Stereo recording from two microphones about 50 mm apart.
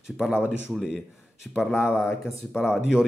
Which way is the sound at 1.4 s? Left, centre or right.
Centre.